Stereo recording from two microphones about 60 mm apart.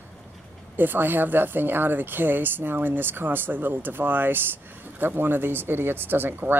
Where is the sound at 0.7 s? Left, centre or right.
Right.